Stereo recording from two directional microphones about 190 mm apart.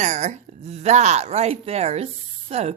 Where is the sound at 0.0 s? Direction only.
35° right (ahead or behind).